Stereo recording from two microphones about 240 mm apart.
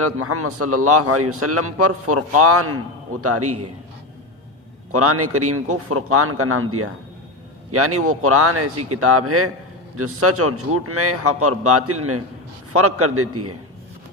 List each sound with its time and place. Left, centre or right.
0.0 s speech: right
4.9 s speech: right